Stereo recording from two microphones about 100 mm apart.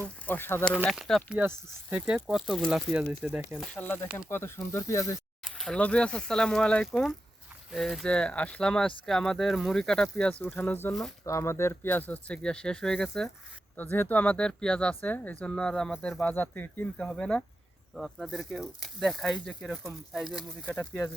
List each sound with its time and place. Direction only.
0.3 s speech: 20° left (ahead or behind)
0.9 s speech: centre (ahead or behind)
1.3 s speech: 15° right (ahead or behind)
3.8 s speech: 20° left (ahead or behind)
5.5 s speech: 5° left (ahead or behind)
10.4 s speech: 20° left (ahead or behind)
13.7 s speech: 20° left (ahead or behind); by 20.4 s 5° right (ahead or behind)
20.7 s speech: 20° left (ahead or behind)